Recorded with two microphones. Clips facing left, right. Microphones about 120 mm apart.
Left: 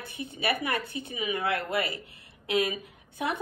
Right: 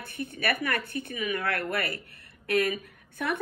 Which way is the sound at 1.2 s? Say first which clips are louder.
Left 1 dB; 20° left (ahead or behind).